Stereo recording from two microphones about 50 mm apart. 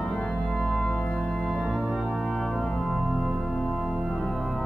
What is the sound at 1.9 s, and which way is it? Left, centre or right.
Music, centre.